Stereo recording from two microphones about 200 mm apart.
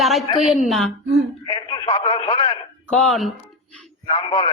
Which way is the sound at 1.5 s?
25° left (ahead or behind).